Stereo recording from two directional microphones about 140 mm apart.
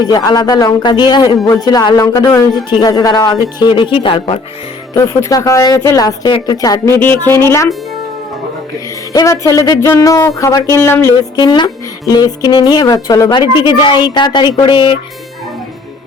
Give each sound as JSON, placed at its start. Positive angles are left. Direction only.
{"t": 0.0, "sound": "speech", "side_deg": 30}
{"t": 4.9, "sound": "speech", "side_deg": 20}
{"t": 9.1, "sound": "speech", "side_deg": 25}
{"t": 11.3, "sound": "speech", "side_deg": 30}